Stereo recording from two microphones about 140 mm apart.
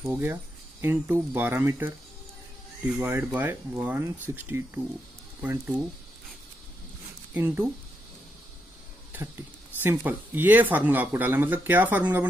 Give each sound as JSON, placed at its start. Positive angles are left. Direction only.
{"t": 0.0, "sound": "speech", "side_deg": -15}
{"t": 3.0, "sound": "speech", "side_deg": -15}
{"t": 7.3, "sound": "speech", "side_deg": -15}
{"t": 9.8, "sound": "speech", "side_deg": -15}